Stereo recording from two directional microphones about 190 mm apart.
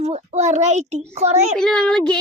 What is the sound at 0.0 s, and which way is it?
A child's voice, 35° right (ahead or behind).